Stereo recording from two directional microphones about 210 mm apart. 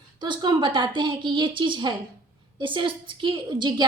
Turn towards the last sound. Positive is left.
turn(degrees=-20)  # may be behind; listen again after turning